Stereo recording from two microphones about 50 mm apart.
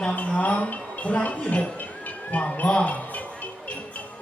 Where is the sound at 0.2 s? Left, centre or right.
Left.